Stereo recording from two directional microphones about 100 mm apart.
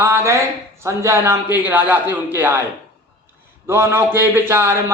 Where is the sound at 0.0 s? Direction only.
25° right (ahead or behind).